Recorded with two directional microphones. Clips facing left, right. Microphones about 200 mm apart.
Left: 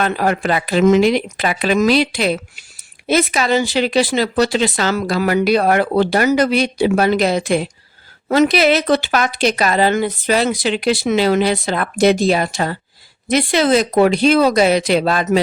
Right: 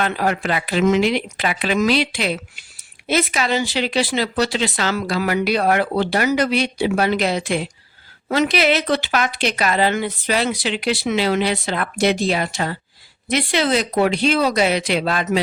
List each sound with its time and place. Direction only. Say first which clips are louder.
0.0 s speech: left 3 dB; 45° left (ahead or behind)